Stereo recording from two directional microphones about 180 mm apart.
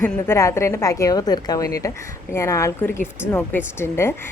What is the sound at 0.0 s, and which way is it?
A woman's voice, 15° left (ahead or behind).